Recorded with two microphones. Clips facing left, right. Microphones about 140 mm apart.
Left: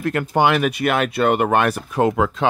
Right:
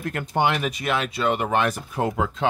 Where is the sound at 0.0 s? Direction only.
80° left.